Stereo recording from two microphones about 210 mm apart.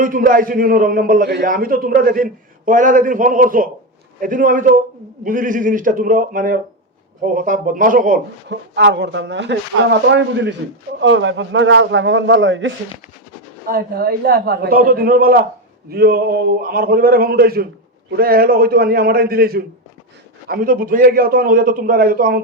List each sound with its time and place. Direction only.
0.0 s a man's voice: 40° right (ahead or behind)
8.4 s speech: 55° right (ahead or behind)
13.7 s a man's voice: 45° right (ahead or behind)